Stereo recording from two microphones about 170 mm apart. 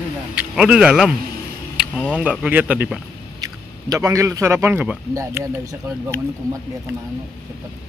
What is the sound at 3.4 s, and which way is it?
Speech, 20° right (ahead or behind).